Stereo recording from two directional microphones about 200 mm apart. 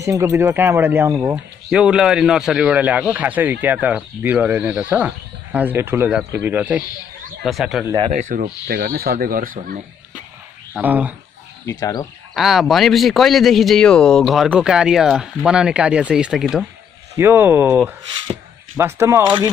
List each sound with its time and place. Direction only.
0.0 s a man's voice: 15° right (ahead or behind)
7.8 s speech: 20° right (ahead or behind)
8.1 s speech: 40° right (ahead or behind)
8.6 s speech: 50° right (ahead or behind)
10.7 s speech: 10° right (ahead or behind)
11.6 s speech: 15° left (ahead or behind)
12.4 s a man's voice: centre (ahead or behind)